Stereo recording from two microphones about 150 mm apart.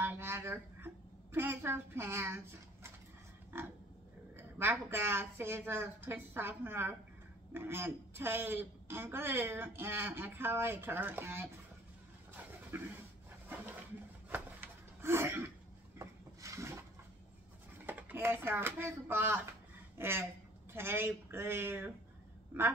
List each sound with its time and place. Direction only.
0.0 s a sound: 15° right (ahead or behind)
3.5 s pig: 15° right (ahead or behind)
4.4 s a woman's voice: 15° right (ahead or behind)
12.7 s a woman's voice: 15° right (ahead or behind)
14.3 s a sound: 15° right (ahead or behind)
17.8 s a woman's voice: 10° right (ahead or behind)